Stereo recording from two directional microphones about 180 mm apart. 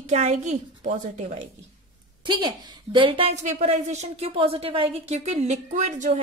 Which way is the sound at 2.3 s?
25° right (ahead or behind).